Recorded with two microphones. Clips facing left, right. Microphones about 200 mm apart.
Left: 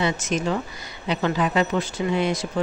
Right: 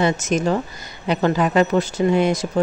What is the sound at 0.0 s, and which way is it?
Speech, 45° right (ahead or behind).